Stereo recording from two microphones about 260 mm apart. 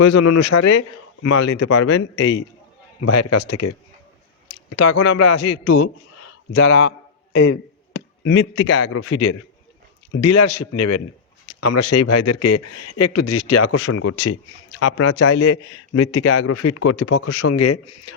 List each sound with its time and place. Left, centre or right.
0.2 s a man's voice: left
1.6 s speech: left
3.0 s speech: left
4.8 s speech: left
6.7 s a man's voice: left
10.2 s speech: left
11.4 s speech: left
13.9 s speech: left